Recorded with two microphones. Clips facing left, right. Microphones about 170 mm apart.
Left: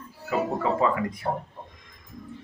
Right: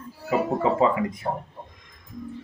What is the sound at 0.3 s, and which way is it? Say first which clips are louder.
Speech: right 3 dB; 20° right (ahead or behind).